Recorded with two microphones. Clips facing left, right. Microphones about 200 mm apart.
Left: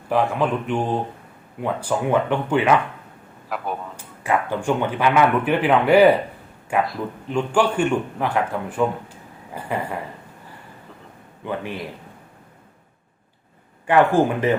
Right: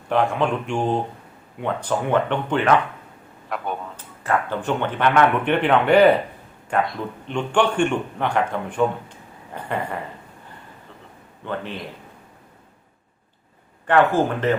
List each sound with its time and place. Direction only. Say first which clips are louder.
0.1 s a man's voice: even; 5° left (ahead or behind)
11.4 s a man's voice: left 1 dB; 10° left (ahead or behind)
13.8 s a man's voice: left 1 dB; 10° left (ahead or behind)